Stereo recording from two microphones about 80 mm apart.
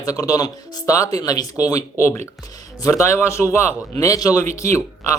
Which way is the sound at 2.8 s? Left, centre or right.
Left.